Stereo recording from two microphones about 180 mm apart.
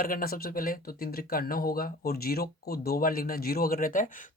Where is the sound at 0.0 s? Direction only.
55° left (ahead or behind).